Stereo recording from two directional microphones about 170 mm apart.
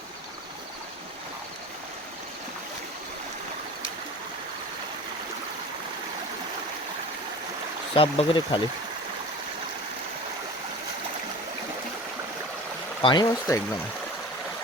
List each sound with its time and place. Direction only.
7.9 s speech: 30° left (ahead or behind)
13.0 s speech: 25° left (ahead or behind)